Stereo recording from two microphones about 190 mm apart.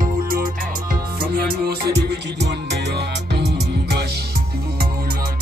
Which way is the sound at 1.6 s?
60° right (ahead or behind).